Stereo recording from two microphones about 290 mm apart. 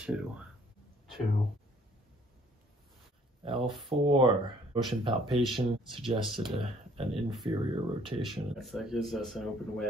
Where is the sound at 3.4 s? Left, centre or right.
Centre.